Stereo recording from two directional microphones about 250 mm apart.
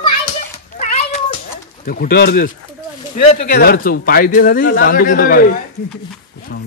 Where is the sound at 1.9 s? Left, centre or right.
Left.